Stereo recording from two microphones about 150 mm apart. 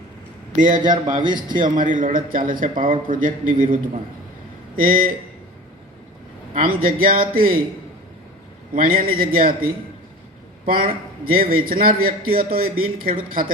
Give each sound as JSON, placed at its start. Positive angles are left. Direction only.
{"t": 0.5, "sound": "a man's voice", "side_deg": -60}
{"t": 0.8, "sound": "a man's voice", "side_deg": -30}
{"t": 1.8, "sound": "a man's voice", "side_deg": -60}
{"t": 4.8, "sound": "a man's voice", "side_deg": -70}
{"t": 6.5, "sound": "a man's voice", "side_deg": -70}
{"t": 8.7, "sound": "a man's voice", "side_deg": -70}
{"t": 10.7, "sound": "a man's voice", "side_deg": -75}